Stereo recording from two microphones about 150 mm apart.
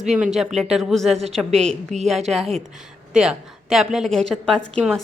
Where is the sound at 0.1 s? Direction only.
5° right (ahead or behind).